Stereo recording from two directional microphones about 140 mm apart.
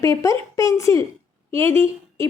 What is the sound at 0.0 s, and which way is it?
A woman's voice, 20° left (ahead or behind).